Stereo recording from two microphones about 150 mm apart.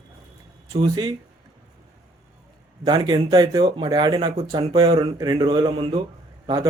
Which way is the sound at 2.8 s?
30° right (ahead or behind).